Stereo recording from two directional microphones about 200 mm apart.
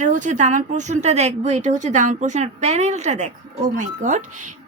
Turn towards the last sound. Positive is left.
turn(degrees=-40)  # may be behind; listen again after turning